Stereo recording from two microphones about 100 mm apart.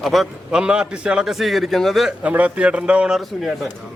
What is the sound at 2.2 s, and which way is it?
A man's voice, 15° right (ahead or behind).